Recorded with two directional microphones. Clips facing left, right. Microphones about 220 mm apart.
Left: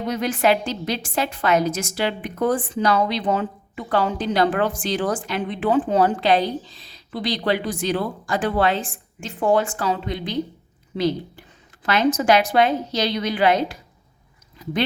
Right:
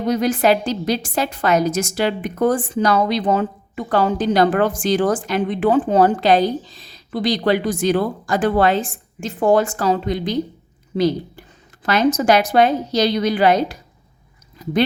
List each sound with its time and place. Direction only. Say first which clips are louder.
0.0 s a woman's voice: right 4 dB; 40° right (ahead or behind)
11.8 s a woman's voice: right 3 dB; 40° right (ahead or behind)